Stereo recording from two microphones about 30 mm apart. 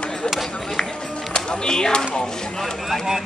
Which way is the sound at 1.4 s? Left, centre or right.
Left.